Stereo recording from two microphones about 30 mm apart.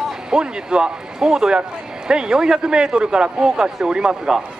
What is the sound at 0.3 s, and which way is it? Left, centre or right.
A man's voice, right.